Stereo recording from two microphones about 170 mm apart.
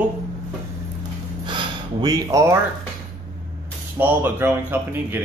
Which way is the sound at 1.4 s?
25° right (ahead or behind).